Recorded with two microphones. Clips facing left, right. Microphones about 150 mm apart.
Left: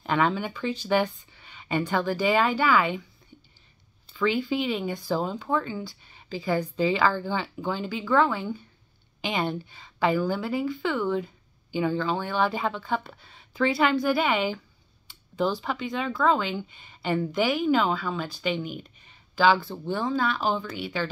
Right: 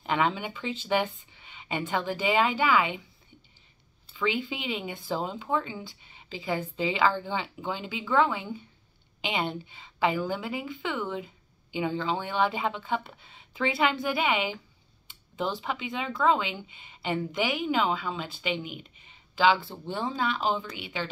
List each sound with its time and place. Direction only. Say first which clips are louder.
0.0 s speech: left 3 dB; 20° right (ahead or behind)
4.2 s speech: left 5 dB; 20° right (ahead or behind)
17.5 s speech: left 6 dB; 45° left (ahead or behind)
17.7 s speech: left 3 dB; 20° right (ahead or behind)
18.6 s speech: left 5 dB; 45° left (ahead or behind)
19.0 s speech: left 2 dB; 20° right (ahead or behind)